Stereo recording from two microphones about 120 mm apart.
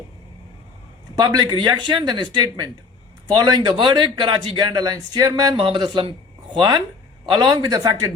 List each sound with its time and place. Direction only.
1.1 s a man's voice: 35° right (ahead or behind)
5.5 s a man's voice: 45° right (ahead or behind)